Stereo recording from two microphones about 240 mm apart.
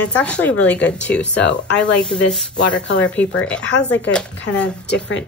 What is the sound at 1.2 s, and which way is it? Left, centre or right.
Speech, left.